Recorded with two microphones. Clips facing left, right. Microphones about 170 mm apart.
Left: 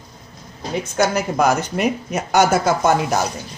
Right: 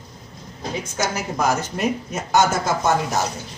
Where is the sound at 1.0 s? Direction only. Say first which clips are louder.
Left 6 dB; 65° left (ahead or behind).